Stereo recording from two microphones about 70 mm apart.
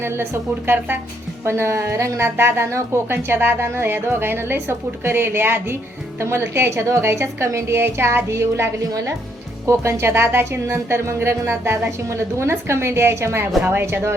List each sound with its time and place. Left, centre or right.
0.0 s a woman's voice: right
1.5 s a woman's voice: right
8.9 s speech: right
9.6 s a woman's voice: right